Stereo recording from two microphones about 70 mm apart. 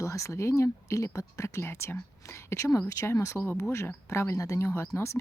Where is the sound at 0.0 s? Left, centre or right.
Left.